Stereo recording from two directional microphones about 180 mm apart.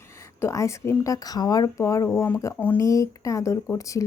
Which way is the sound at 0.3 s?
15° left (ahead or behind).